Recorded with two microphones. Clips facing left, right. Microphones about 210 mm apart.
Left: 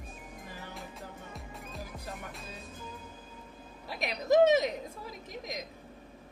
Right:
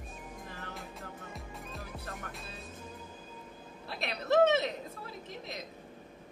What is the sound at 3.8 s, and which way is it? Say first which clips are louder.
A woman's voice: left 3 dB; 15° left (ahead or behind).